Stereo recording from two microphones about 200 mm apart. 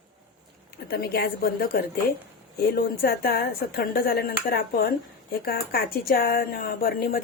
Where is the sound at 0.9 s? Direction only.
50° left (ahead or behind).